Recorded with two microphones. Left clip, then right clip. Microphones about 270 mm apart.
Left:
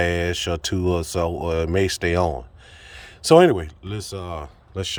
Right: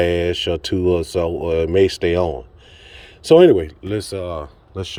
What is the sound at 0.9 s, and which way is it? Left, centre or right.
Speech, left.